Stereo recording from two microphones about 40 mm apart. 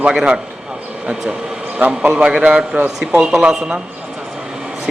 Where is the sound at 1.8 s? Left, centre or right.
Right.